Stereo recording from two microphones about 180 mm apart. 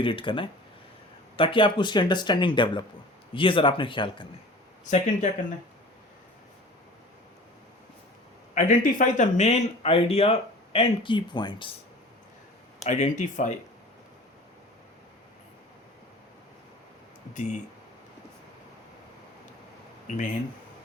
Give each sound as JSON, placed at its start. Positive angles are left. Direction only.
{"t": 0.0, "sound": "speech", "side_deg": 30}
{"t": 4.9, "sound": "speech", "side_deg": 40}
{"t": 8.5, "sound": "speech", "side_deg": 50}
{"t": 12.8, "sound": "speech", "side_deg": 40}
{"t": 17.3, "sound": "speech", "side_deg": 45}